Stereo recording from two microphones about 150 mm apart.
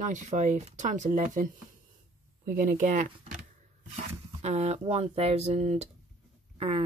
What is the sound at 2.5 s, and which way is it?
Speech, 65° right (ahead or behind).